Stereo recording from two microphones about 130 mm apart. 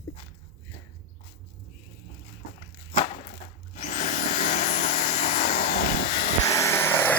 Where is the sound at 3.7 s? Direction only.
85° left.